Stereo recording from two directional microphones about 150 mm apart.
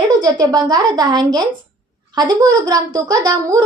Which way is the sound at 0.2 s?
25° right (ahead or behind).